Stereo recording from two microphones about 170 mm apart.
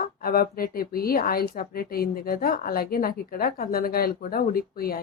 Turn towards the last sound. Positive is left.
turn(degrees=60)  # may be behind; listen again after turning